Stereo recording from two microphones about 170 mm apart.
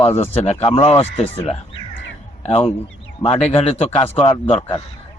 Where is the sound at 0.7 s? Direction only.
35° left (ahead or behind).